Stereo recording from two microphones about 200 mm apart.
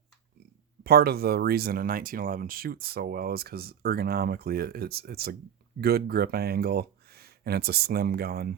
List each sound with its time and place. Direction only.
0.9 s speech: 50° right (ahead or behind)